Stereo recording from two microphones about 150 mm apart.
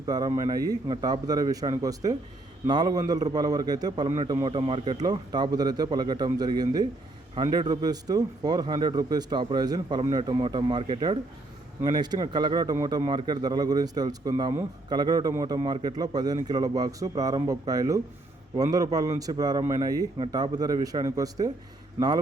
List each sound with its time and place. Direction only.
0.0 s speech: 25° right (ahead or behind)